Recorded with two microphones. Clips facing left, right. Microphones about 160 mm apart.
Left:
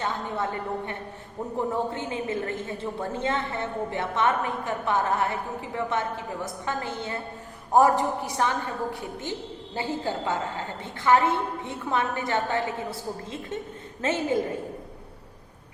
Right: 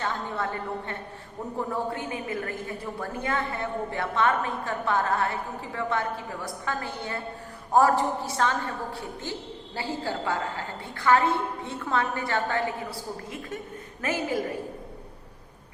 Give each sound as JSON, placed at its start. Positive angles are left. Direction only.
{"t": 0.0, "sound": "a woman's voice", "side_deg": 20}
{"t": 14.0, "sound": "a woman's voice", "side_deg": 25}